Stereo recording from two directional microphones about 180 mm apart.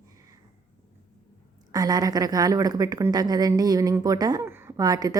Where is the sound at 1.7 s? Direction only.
20° right (ahead or behind).